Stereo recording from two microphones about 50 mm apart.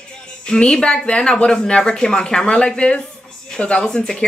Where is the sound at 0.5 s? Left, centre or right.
Centre.